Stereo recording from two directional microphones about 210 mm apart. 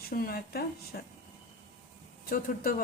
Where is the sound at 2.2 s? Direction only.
45° left (ahead or behind).